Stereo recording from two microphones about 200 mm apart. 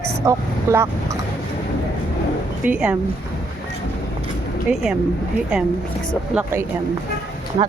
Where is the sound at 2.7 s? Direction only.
5° right (ahead or behind).